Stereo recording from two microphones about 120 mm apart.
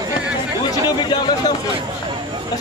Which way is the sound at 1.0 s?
40° left (ahead or behind).